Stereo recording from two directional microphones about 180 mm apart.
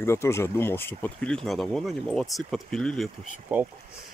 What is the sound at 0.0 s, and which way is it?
Speech, 15° left (ahead or behind).